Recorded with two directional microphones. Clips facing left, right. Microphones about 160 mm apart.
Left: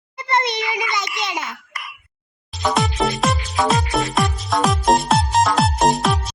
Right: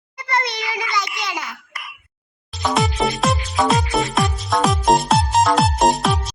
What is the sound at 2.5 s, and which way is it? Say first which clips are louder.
Music: even; centre (ahead or behind).